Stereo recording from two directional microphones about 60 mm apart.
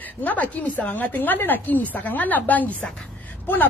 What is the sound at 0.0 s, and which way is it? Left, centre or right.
A woman's voice, left.